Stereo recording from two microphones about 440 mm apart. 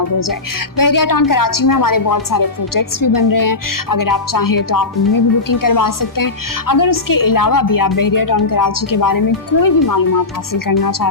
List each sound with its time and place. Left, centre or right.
0.0 s a woman's voice: left